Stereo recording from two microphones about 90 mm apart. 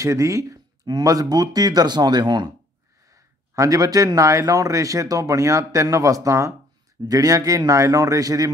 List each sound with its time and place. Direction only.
0.0 s speech: 35° right (ahead or behind); by 2.5 s 55° right (ahead or behind)
3.1 s speech: 35° right (ahead or behind)